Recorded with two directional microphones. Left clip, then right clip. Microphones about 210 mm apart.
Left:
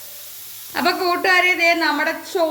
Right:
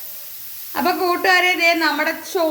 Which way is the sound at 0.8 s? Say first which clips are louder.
Even; 10° right (ahead or behind).